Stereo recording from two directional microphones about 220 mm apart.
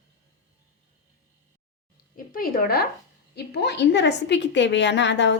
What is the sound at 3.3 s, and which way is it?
A woman's voice, 50° left (ahead or behind).